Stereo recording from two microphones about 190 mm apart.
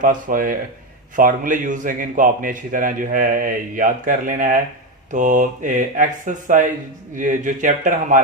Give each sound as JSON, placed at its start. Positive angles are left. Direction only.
{"t": 0.0, "sound": "a man's voice", "side_deg": -45}